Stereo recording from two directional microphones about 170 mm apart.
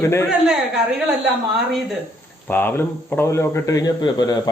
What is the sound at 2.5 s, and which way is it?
A man's voice, 10° left (ahead or behind).